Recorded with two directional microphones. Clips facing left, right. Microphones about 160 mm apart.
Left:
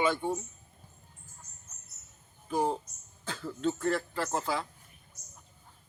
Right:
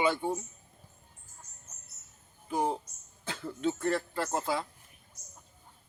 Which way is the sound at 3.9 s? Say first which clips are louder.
Even; 20° right (ahead or behind).